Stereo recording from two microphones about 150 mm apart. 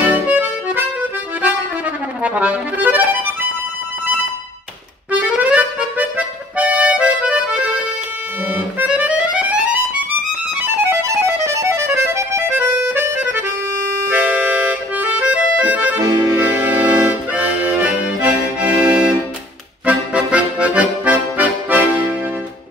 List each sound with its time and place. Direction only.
0.0 s music: 10° right (ahead or behind)
2.2 s accordion: 10° right (ahead or behind)
5.2 s accordion: 10° right (ahead or behind)
10.6 s music: 15° right (ahead or behind)
16.0 s accordion: 25° right (ahead or behind)
16.5 s accordion: 10° right (ahead or behind)